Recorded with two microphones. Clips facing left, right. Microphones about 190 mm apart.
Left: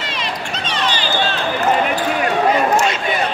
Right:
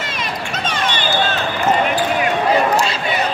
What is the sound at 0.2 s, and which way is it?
Run, 50° right (ahead or behind).